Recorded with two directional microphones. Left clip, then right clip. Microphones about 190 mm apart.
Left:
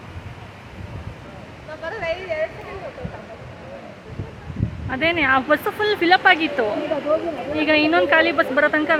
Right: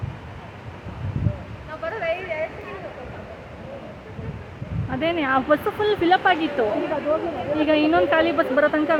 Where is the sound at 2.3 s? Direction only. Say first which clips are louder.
Left 3 dB; 50° left (ahead or behind).